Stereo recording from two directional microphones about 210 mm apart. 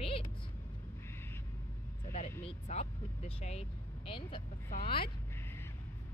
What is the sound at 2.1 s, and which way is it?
Speech, 35° left (ahead or behind).